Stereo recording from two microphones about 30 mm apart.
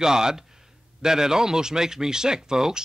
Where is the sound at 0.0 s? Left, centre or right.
Right.